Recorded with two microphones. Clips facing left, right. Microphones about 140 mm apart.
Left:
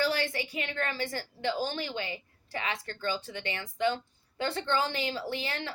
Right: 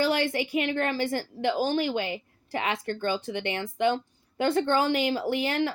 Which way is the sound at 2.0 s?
60° right (ahead or behind).